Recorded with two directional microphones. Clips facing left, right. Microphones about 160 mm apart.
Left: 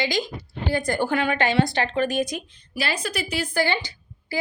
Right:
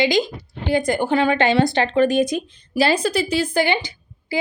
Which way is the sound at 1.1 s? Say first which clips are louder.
Right 6 dB; 30° right (ahead or behind).